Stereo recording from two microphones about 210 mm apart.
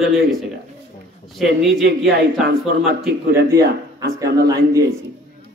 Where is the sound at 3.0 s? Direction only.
10° right (ahead or behind).